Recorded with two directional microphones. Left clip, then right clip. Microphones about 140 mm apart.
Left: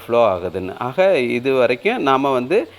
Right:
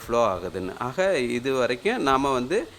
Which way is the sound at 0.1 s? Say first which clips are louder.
Left 7 dB; 15° left (ahead or behind).